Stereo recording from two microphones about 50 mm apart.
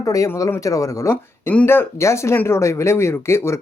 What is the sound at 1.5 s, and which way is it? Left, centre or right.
Speech, left.